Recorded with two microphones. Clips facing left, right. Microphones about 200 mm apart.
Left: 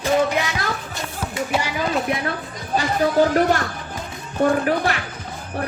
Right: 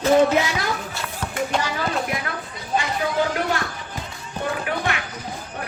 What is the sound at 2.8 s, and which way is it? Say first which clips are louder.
Speech: left 7 dB; 40° left (ahead or behind).